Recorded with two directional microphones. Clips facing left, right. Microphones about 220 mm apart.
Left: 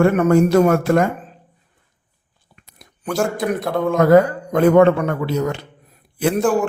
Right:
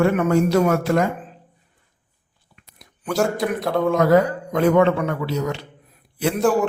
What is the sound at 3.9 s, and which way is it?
A man's voice, 50° left (ahead or behind).